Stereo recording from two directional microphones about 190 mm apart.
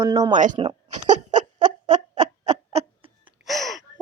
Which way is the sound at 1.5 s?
25° right (ahead or behind).